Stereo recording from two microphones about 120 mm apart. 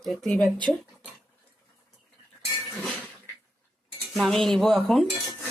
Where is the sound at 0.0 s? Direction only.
5° left (ahead or behind).